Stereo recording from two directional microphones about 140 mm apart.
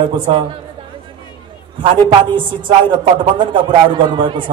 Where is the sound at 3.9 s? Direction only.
35° right (ahead or behind).